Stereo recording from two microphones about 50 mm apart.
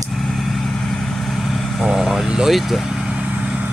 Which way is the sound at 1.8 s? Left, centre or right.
Centre.